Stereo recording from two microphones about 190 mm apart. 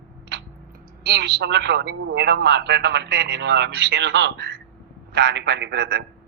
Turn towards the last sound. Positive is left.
turn(degrees=-60)  # may be behind; listen again after turning